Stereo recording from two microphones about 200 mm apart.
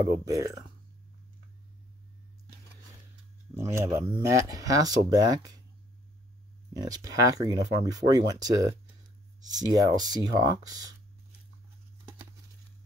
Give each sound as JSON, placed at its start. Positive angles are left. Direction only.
{"t": 0.0, "sound": "speech", "side_deg": -15}
{"t": 3.7, "sound": "speech", "side_deg": -15}
{"t": 6.7, "sound": "speech", "side_deg": -20}